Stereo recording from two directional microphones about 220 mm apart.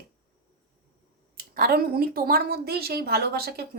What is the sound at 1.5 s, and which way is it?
Speech, 45° right (ahead or behind).